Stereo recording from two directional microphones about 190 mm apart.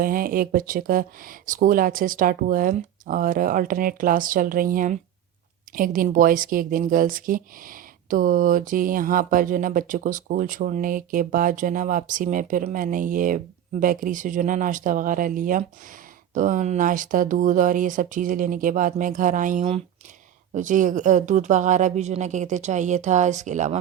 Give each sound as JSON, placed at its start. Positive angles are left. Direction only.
{"t": 0.0, "sound": "speech", "side_deg": -50}